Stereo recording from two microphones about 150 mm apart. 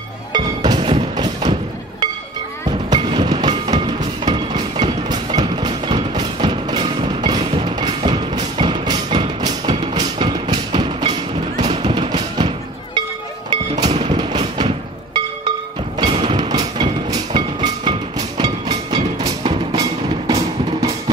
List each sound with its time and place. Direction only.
0.3 s music: 30° right (ahead or behind)
2.9 s music: 35° right (ahead or behind)
16.0 s music: 35° right (ahead or behind)